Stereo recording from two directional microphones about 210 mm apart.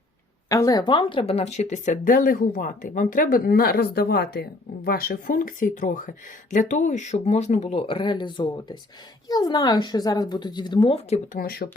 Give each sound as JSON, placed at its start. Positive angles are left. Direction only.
{"t": 0.4, "sound": "speech", "side_deg": 15}
{"t": 11.3, "sound": "speech", "side_deg": 45}